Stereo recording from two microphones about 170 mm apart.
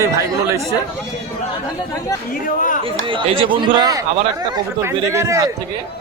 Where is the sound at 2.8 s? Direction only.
30° right (ahead or behind).